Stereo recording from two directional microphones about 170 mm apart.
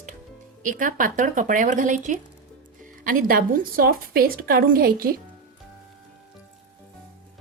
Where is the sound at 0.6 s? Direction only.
50° right (ahead or behind).